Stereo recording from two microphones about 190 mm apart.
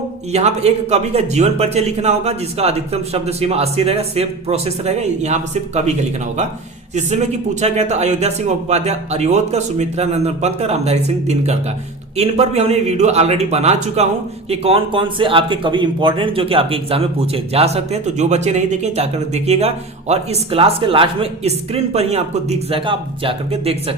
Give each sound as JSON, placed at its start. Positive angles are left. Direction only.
{"t": 0.3, "sound": "speech", "side_deg": -35}
{"t": 6.9, "sound": "speech", "side_deg": -35}